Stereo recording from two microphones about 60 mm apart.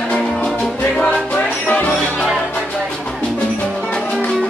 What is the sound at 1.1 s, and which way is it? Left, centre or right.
Music, left.